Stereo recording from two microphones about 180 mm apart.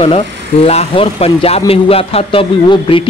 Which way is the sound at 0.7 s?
35° left (ahead or behind).